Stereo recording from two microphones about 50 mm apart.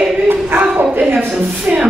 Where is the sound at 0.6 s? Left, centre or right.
Right.